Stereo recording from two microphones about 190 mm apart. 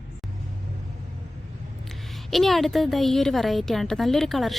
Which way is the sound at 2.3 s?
Centre (ahead or behind).